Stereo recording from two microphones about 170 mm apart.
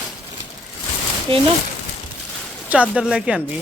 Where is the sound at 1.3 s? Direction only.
30° right (ahead or behind).